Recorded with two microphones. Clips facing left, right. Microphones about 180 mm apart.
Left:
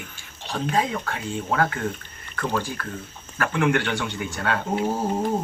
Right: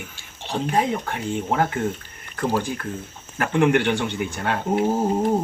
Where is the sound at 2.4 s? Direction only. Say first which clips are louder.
Right 3 dB; 35° right (ahead or behind).